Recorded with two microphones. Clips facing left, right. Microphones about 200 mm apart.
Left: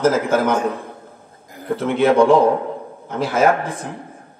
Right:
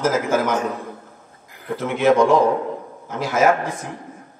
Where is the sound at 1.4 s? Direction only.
45° left (ahead or behind).